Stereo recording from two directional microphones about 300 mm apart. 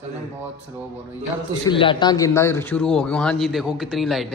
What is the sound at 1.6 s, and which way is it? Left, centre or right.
A man's voice, centre.